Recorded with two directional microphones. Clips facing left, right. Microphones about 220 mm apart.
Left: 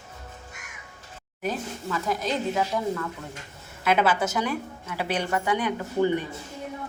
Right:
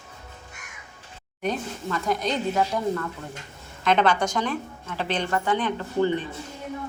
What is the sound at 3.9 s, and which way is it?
A woman's voice, 5° left (ahead or behind).